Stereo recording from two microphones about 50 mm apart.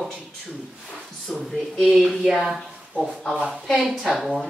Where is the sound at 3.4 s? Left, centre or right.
Centre.